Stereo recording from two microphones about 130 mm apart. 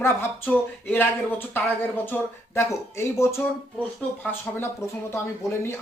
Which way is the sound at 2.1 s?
20° left (ahead or behind).